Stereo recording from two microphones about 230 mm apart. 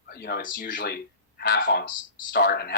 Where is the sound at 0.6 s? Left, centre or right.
Left.